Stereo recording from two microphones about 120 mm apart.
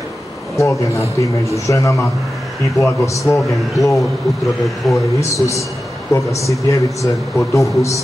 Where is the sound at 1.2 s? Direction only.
25° left (ahead or behind).